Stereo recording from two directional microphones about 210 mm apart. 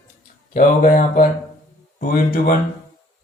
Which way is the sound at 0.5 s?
40° left (ahead or behind).